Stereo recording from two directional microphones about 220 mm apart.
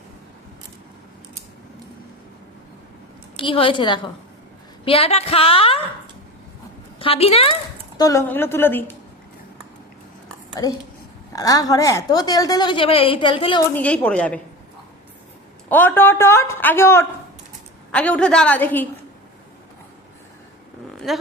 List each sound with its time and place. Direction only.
3.3 s a woman's voice: 25° left (ahead or behind)
7.0 s a woman's voice: 25° left (ahead or behind)
7.9 s a woman's voice: 15° left (ahead or behind)
11.3 s a woman's voice: 15° left (ahead or behind)
13.7 s a woman's voice: 5° left (ahead or behind)
15.7 s a woman's voice: 10° left (ahead or behind)
21.1 s speech: centre (ahead or behind)